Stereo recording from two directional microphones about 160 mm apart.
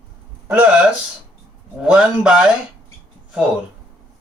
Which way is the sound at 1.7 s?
5° right (ahead or behind).